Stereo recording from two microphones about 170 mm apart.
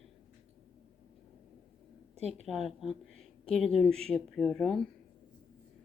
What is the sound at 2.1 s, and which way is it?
Speech, 40° right (ahead or behind).